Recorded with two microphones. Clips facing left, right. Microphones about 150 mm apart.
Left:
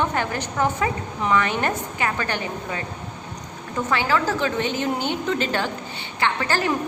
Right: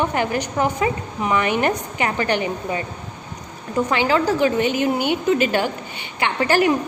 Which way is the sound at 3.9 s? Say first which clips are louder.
Right 3 dB; 15° right (ahead or behind).